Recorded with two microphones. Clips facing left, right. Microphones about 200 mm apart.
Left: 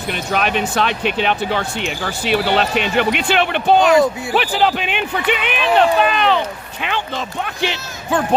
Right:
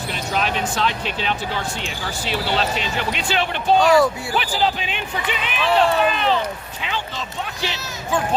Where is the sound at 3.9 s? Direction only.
20° left (ahead or behind).